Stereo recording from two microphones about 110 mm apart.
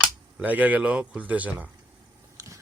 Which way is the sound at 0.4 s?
15° right (ahead or behind).